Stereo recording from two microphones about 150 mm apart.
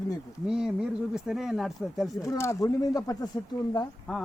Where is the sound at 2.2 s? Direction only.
20° left (ahead or behind).